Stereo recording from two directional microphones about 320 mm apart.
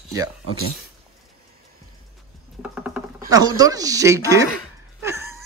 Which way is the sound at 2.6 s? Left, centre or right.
Centre.